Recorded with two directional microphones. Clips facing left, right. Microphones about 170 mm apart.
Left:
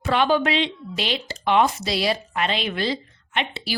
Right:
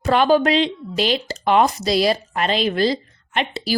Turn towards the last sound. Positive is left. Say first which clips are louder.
# right 4 dB
turn(degrees=-40)  # may be behind; listen again after turning